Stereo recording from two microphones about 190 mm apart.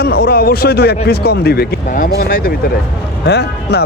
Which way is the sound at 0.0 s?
55° left (ahead or behind).